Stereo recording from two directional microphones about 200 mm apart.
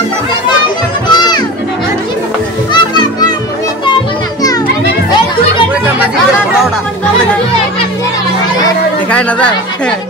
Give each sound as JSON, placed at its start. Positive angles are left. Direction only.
{"t": 1.1, "sound": "music", "side_deg": 20}
{"t": 2.7, "sound": "children playing", "side_deg": 20}
{"t": 9.1, "sound": "speech", "side_deg": 5}